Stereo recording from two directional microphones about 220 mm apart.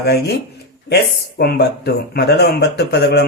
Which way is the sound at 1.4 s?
45° left (ahead or behind).